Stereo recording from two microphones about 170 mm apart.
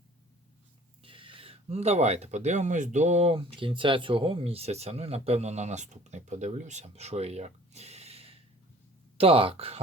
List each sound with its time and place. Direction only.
1.0 s speech: 30° right (ahead or behind)